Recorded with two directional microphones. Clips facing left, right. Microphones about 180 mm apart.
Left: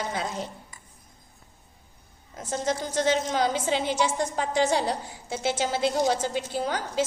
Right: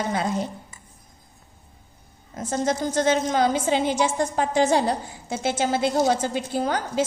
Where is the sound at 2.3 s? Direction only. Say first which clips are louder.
Right 4 dB; 50° right (ahead or behind).